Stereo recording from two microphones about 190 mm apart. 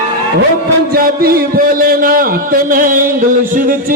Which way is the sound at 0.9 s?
50° right (ahead or behind).